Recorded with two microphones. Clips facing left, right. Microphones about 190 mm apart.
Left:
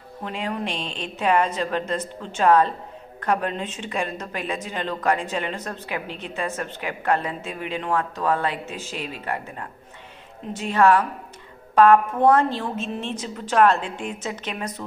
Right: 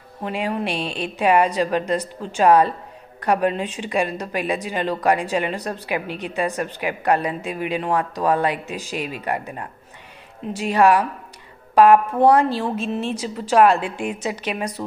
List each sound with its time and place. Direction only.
0.2 s a woman's voice: 10° right (ahead or behind)
12.2 s a woman's voice: 35° right (ahead or behind)
12.5 s a woman's voice: 10° right (ahead or behind)